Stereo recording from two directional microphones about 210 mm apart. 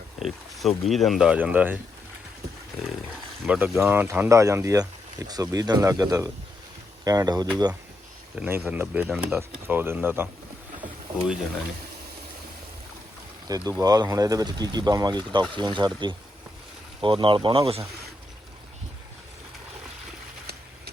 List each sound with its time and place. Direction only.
0.2 s a sound: centre (ahead or behind)
0.9 s speech: centre (ahead or behind)
3.4 s speech: 5° right (ahead or behind)
8.4 s speech: 10° right (ahead or behind)
13.5 s speech: 15° right (ahead or behind)